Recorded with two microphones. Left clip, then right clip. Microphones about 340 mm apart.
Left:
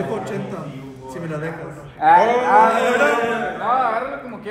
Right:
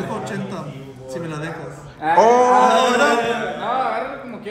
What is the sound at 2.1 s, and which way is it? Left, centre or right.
Speech, right.